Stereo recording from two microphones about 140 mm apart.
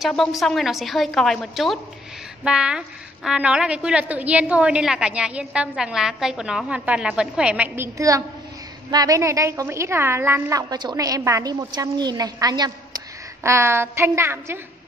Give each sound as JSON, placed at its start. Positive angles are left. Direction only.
{"t": 0.0, "sound": "a woman's voice", "side_deg": 0}
{"t": 10.7, "sound": "a woman's voice", "side_deg": -30}